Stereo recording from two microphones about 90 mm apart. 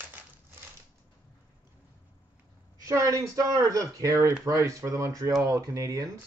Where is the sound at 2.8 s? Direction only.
40° right (ahead or behind).